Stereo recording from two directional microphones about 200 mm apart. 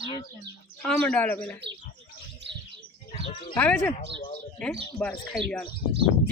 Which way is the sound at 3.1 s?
30° left (ahead or behind).